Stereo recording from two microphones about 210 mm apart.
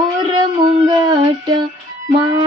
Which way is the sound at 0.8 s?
20° right (ahead or behind).